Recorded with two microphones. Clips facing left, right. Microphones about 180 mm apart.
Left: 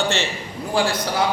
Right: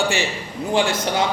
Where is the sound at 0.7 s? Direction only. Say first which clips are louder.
Right 1 dB; 20° right (ahead or behind).